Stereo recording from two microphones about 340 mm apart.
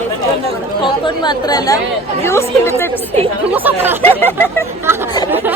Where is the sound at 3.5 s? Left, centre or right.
Centre.